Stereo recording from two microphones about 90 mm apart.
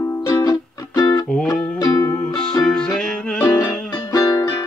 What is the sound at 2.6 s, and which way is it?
Music, 5° left (ahead or behind).